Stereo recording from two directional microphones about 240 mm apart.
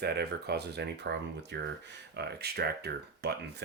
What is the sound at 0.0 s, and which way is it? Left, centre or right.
Speech, right.